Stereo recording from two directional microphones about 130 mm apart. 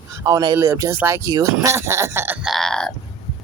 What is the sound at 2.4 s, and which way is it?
Grunt, centre (ahead or behind).